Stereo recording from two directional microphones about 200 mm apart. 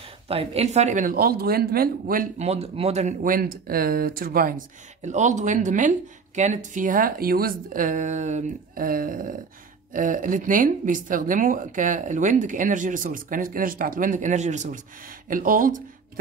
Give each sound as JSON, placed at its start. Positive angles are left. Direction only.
{"t": 0.3, "sound": "speech", "side_deg": -30}